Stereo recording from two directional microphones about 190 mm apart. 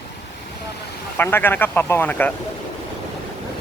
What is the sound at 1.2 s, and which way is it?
Speech, 10° left (ahead or behind).